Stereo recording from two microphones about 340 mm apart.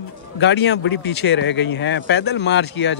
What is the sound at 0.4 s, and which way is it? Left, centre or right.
Speech, left.